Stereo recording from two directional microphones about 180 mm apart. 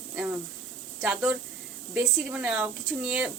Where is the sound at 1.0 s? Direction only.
5° right (ahead or behind).